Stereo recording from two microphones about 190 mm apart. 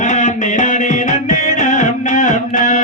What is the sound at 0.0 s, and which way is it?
Music, 40° left (ahead or behind).